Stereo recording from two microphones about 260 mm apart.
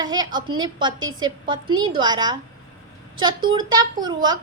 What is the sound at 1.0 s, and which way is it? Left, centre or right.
Speech, right.